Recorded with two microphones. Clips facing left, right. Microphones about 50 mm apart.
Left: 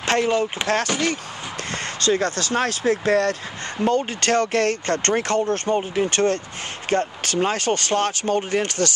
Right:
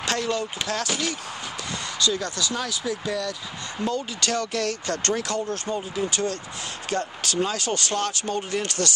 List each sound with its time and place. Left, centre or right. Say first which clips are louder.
0.0 s speech: left 6 dB; left
0.7 s speech: left 5 dB; left
3.8 s speech: left 7 dB; left
6.9 s speech: left 6 dB; left